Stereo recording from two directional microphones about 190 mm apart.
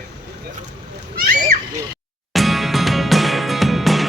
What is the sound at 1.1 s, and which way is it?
Splash, 50° right (ahead or behind).